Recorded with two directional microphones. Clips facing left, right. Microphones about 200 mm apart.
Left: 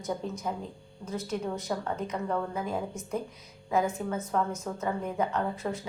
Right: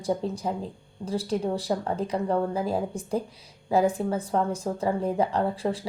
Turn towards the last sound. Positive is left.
turn(degrees=-30)  # may be behind; listen again after turning